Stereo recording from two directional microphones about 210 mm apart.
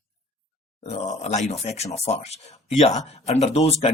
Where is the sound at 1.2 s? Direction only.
30° left (ahead or behind).